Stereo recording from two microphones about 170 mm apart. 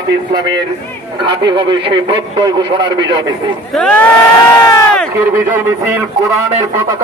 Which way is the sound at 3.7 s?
5° left (ahead or behind).